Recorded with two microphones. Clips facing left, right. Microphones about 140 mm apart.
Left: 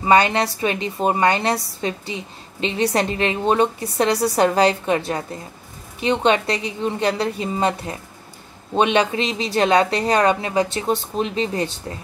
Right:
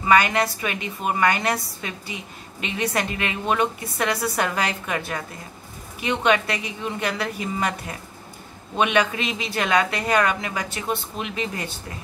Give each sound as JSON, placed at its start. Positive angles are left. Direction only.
{"t": 0.0, "sound": "a woman's voice", "side_deg": 30}